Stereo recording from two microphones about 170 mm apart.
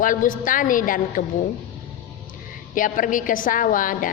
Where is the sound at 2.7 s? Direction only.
50° left (ahead or behind).